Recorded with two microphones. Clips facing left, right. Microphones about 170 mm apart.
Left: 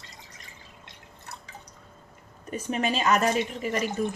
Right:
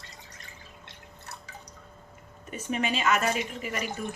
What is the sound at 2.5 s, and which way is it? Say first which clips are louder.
Speech: left 2 dB; 35° left (ahead or behind).